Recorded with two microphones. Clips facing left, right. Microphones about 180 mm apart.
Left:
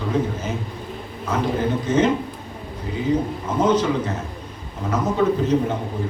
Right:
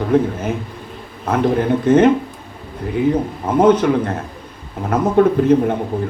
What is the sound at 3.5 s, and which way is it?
Speech, 55° right (ahead or behind).